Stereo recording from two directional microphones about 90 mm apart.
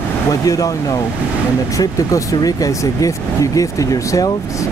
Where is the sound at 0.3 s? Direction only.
45° left (ahead or behind).